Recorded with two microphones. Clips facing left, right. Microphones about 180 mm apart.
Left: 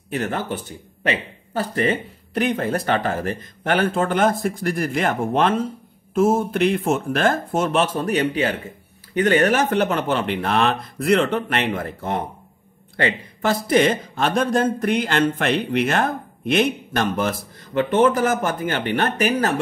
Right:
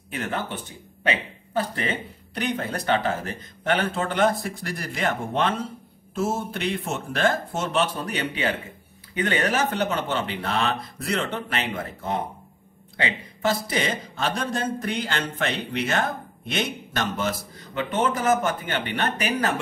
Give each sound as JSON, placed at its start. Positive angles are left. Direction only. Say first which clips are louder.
{"t": 1.5, "sound": "speech", "louder": "left 5 dB", "side_deg": 45}
{"t": 9.5, "sound": "speech", "louder": "left 5 dB", "side_deg": 60}
{"t": 12.9, "sound": "speech", "louder": "left 6 dB", "side_deg": 55}